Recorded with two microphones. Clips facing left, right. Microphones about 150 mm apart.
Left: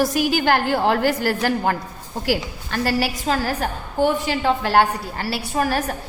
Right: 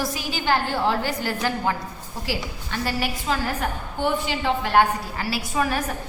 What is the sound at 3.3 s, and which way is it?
A woman's voice, 40° left (ahead or behind).